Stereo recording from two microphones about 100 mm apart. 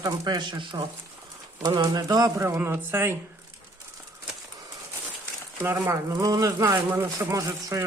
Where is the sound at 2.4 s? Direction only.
25° right (ahead or behind).